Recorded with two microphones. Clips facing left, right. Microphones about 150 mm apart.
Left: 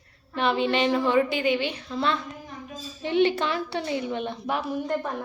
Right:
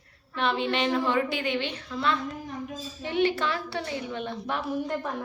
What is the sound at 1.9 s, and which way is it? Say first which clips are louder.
A woman's voice: right 1 dB; 30° left (ahead or behind).